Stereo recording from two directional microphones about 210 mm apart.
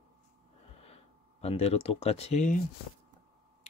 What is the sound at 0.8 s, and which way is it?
Speech, 30° left (ahead or behind).